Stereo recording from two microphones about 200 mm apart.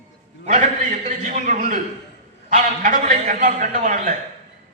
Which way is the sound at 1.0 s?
40° right (ahead or behind).